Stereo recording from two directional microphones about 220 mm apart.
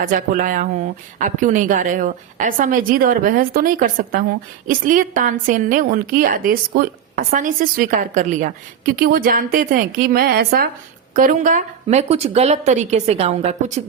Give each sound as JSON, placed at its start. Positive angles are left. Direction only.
{"t": 0.0, "sound": "a woman's voice", "side_deg": -40}